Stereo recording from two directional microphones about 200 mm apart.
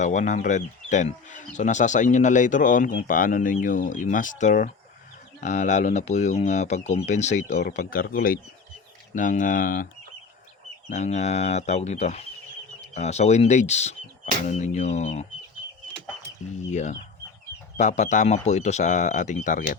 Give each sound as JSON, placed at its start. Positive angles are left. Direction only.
{"t": 0.0, "sound": "speech", "side_deg": 35}
{"t": 10.8, "sound": "speech", "side_deg": 35}
{"t": 16.7, "sound": "speech", "side_deg": 35}